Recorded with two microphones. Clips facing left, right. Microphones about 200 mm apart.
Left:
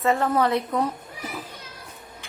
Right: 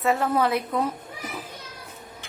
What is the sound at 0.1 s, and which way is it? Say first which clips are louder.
Speech: left 1 dB; 5° right (ahead or behind).